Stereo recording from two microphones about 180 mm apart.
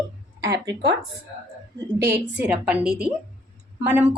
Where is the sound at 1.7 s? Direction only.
15° right (ahead or behind).